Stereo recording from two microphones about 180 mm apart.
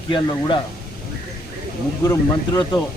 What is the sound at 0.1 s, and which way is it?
Speech, 25° left (ahead or behind).